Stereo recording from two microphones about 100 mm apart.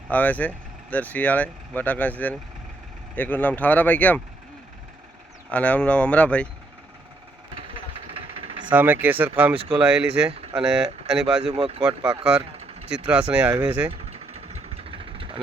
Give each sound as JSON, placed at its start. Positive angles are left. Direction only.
{"t": 0.1, "sound": "speech", "side_deg": 15}
{"t": 5.5, "sound": "speech", "side_deg": 15}
{"t": 7.5, "sound": "a sound", "side_deg": -65}
{"t": 8.7, "sound": "speech", "side_deg": -20}
{"t": 9.6, "sound": "speech", "side_deg": -65}
{"t": 9.8, "sound": "speech", "side_deg": -10}
{"t": 10.2, "sound": "speech", "side_deg": -75}
{"t": 10.6, "sound": "speech", "side_deg": -5}
{"t": 11.5, "sound": "speech", "side_deg": -65}
{"t": 11.8, "sound": "speech", "side_deg": -10}
{"t": 12.4, "sound": "a sound", "side_deg": -90}
{"t": 13.3, "sound": "speech", "side_deg": -20}
{"t": 13.9, "sound": "vehicle", "side_deg": -90}